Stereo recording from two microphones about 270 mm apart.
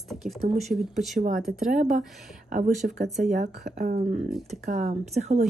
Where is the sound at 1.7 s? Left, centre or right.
Right.